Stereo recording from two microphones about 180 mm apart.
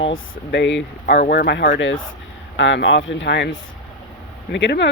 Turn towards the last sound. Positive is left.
turn(degrees=75)  # may be behind; listen again after turning